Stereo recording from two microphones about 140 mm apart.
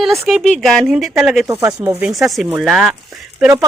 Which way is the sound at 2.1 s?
Centre (ahead or behind).